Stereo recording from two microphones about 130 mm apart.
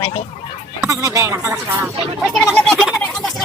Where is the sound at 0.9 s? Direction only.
25° right (ahead or behind).